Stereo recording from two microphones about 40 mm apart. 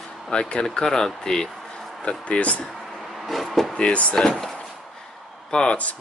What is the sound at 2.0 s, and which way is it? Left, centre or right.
Speech, left.